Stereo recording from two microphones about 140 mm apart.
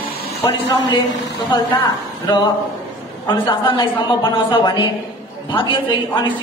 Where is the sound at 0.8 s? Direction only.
30° left (ahead or behind).